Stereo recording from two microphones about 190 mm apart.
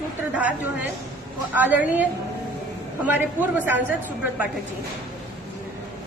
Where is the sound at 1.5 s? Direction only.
10° right (ahead or behind).